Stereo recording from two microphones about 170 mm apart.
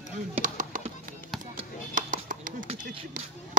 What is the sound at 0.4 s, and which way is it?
Music, 50° right (ahead or behind).